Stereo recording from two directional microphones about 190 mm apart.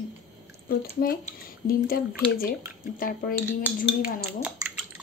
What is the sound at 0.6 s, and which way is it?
Speech, 50° left (ahead or behind).